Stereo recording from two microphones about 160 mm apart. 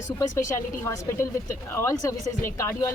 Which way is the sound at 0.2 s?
20° left (ahead or behind).